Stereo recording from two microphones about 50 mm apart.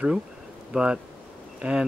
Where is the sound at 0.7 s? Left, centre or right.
Centre.